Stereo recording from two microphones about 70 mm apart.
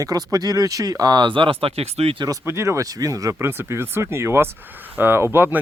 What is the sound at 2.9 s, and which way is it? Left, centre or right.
Speech, right.